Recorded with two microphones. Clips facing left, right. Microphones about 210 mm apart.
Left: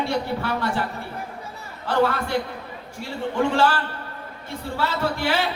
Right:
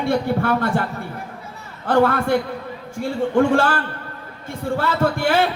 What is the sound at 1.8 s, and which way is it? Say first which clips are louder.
A man's voice: right 5 dB; 50° right (ahead or behind).